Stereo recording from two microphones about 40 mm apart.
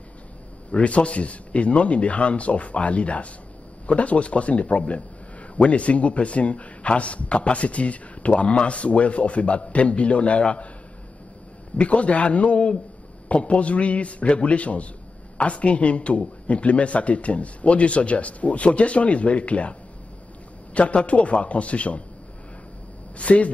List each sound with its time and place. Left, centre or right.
0.7 s a man's voice: left
11.7 s a man's voice: left
23.1 s a man's voice: left